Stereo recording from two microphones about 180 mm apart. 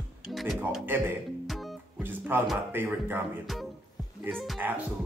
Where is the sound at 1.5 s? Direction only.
Centre (ahead or behind).